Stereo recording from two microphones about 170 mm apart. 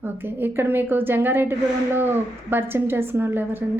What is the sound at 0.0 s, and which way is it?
A woman's voice, 10° right (ahead or behind).